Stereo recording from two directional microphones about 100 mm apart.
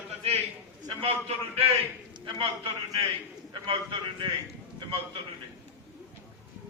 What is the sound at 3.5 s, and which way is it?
Speech, 55° right (ahead or behind).